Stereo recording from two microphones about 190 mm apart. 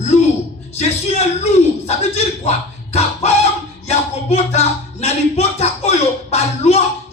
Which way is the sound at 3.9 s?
35° left (ahead or behind).